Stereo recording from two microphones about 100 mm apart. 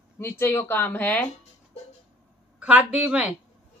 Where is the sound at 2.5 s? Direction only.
15° right (ahead or behind).